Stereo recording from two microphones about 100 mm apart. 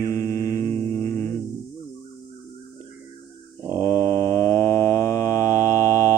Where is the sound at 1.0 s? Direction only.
30° left (ahead or behind).